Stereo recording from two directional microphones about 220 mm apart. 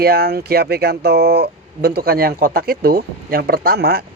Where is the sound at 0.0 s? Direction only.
45° right (ahead or behind).